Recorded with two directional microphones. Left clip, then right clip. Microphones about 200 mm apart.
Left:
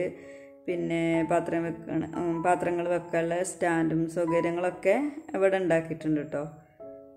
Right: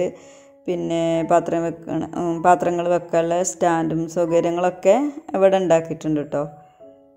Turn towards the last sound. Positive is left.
turn(degrees=-25)  # may be behind; listen again after turning